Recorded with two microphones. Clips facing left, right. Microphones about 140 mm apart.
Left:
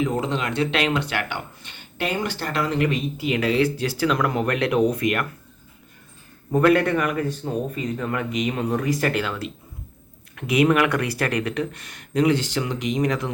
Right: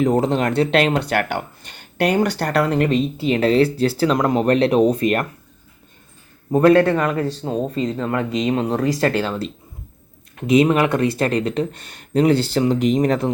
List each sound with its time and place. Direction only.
0.0 s speech: 40° right (ahead or behind)
2.9 s speech: 30° right (ahead or behind)
6.5 s speech: 30° right (ahead or behind)